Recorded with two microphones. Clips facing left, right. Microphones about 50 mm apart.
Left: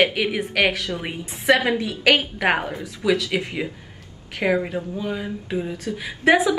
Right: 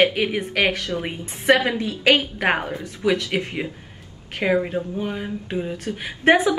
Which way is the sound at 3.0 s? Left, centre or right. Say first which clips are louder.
Even; right.